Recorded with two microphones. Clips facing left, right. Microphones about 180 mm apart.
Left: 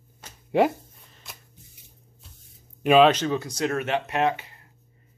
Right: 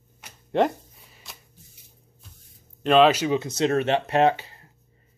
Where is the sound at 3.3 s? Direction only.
25° right (ahead or behind).